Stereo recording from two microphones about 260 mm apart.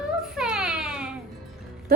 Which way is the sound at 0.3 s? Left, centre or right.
Centre.